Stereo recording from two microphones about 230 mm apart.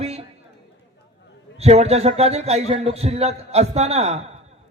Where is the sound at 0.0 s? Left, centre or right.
Right.